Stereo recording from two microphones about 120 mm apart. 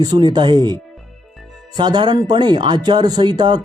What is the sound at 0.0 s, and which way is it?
Speech, 35° right (ahead or behind).